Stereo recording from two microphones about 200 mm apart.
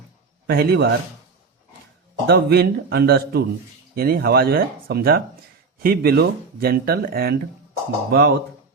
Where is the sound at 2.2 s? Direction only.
50° right (ahead or behind).